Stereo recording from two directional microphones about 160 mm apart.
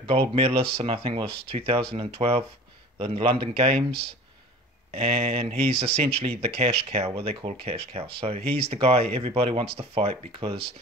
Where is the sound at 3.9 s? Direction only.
90° right.